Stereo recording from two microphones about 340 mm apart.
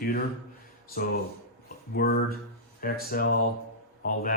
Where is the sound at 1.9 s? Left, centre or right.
Left.